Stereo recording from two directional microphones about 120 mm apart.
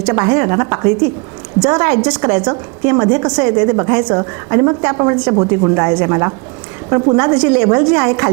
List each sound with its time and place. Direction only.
0.0 s a woman's voice: 20° right (ahead or behind)